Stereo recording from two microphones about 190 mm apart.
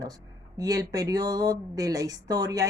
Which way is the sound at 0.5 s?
20° right (ahead or behind).